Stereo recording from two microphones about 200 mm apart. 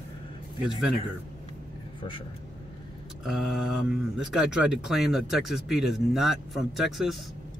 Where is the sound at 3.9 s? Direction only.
5° right (ahead or behind).